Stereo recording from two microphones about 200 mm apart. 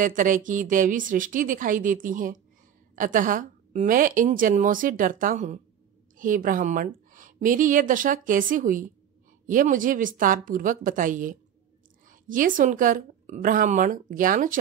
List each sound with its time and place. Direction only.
0.0 s a woman's voice: 40° right (ahead or behind)